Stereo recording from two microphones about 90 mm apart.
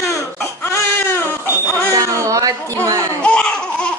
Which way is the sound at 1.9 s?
35° right (ahead or behind).